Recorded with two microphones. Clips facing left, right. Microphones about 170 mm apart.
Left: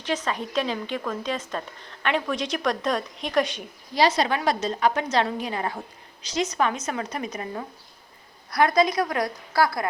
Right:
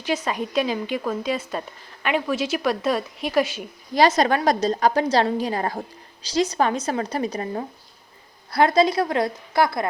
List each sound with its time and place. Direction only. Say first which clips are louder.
0.0 s a woman's voice: right 3 dB; 10° right (ahead or behind)
3.9 s a woman's voice: right 4 dB; 45° right (ahead or behind); by 9.8 s 20° right (ahead or behind)